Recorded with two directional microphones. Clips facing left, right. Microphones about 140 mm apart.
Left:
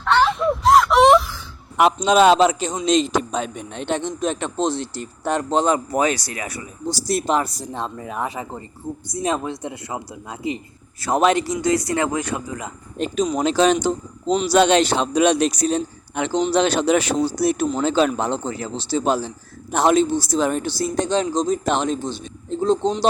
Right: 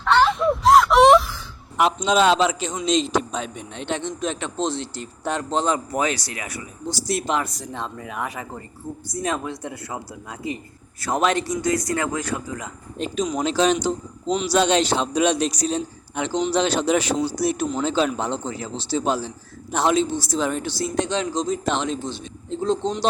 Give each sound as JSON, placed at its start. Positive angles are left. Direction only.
{"t": 0.0, "sound": "wail", "side_deg": 0}
{"t": 1.8, "sound": "a man's voice", "side_deg": 55}
{"t": 2.8, "sound": "a man's voice", "side_deg": 55}
{"t": 9.2, "sound": "a man's voice", "side_deg": 25}
{"t": 13.0, "sound": "a man's voice", "side_deg": 50}